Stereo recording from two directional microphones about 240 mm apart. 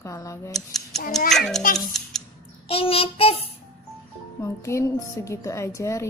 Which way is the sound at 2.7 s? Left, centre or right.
Left.